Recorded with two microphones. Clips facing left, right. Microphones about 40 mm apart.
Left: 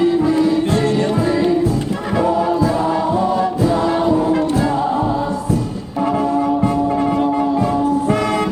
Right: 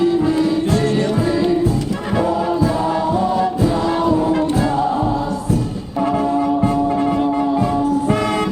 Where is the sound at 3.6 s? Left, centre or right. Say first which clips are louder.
Left 1 dB; left.